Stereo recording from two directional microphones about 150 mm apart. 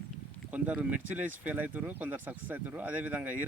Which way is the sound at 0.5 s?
10° right (ahead or behind).